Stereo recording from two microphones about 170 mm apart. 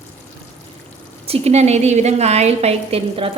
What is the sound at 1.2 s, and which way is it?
A woman's voice, 35° right (ahead or behind).